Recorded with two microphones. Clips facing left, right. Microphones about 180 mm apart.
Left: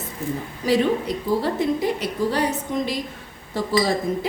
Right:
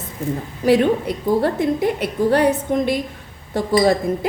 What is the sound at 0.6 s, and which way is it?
A woman's voice, 55° right (ahead or behind).